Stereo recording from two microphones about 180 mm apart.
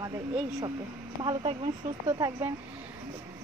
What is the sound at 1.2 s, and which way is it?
A woman's voice, 30° right (ahead or behind).